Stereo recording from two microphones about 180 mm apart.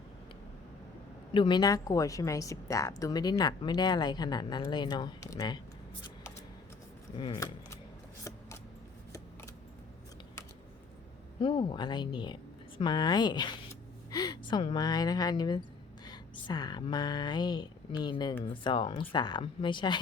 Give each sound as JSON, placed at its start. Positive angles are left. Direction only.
{"t": 1.3, "sound": "a woman's voice", "side_deg": 25}
{"t": 7.2, "sound": "speech", "side_deg": 25}
{"t": 11.3, "sound": "a woman's voice", "side_deg": 25}